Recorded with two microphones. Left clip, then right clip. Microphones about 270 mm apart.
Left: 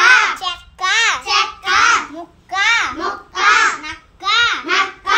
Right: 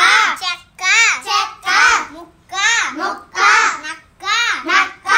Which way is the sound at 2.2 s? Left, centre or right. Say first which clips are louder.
Left 1 dB; centre.